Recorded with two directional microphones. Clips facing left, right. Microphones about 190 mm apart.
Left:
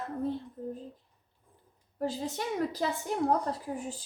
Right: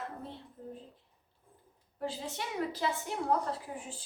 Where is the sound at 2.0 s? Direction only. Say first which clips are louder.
Left 5 dB; 40° left (ahead or behind).